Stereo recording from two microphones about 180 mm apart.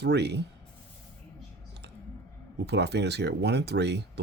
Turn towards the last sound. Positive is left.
turn(degrees=-70)  # may be behind; listen again after turning